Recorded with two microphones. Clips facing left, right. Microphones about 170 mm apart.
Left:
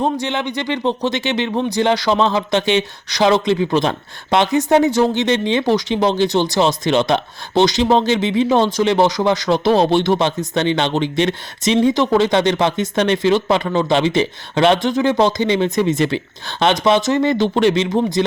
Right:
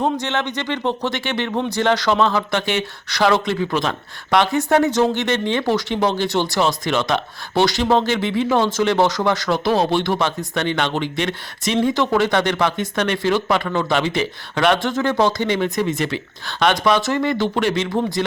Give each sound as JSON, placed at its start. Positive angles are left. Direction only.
{"t": 0.0, "sound": "speech", "side_deg": 15}